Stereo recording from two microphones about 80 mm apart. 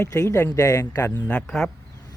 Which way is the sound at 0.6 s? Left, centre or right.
Left.